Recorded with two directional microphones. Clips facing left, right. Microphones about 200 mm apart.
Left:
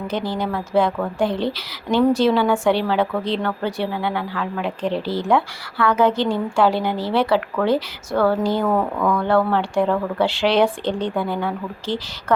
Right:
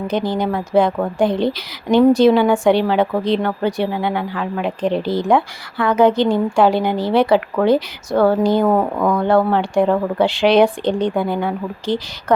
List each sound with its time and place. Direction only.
0.1 s a woman's voice: 15° right (ahead or behind)